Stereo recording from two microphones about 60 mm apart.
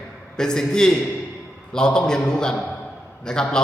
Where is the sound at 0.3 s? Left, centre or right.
Centre.